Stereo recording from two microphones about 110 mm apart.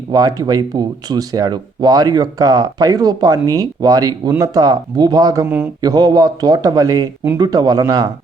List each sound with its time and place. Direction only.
0.1 s speech: 35° right (ahead or behind)